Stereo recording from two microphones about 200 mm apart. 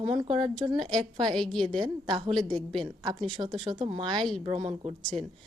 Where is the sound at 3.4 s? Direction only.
25° right (ahead or behind).